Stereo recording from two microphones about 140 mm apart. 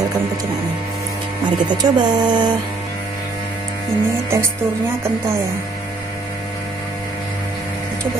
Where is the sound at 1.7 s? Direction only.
30° right (ahead or behind).